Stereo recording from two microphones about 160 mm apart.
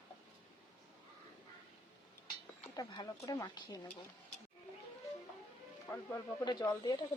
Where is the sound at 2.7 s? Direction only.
25° left (ahead or behind).